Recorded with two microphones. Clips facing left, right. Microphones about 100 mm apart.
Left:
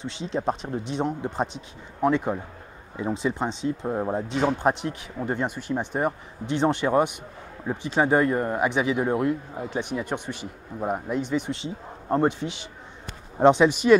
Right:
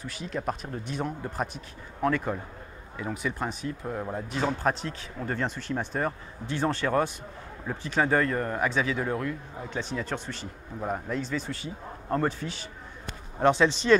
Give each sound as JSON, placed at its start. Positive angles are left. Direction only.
{"t": 0.0, "sound": "speech", "side_deg": 25}